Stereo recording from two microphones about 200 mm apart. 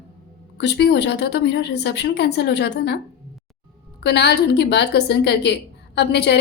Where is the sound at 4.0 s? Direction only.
55° left (ahead or behind).